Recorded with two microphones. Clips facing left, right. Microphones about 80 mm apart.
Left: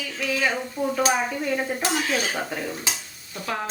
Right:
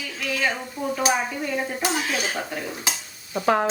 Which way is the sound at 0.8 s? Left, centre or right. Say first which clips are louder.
Left 3 dB; centre.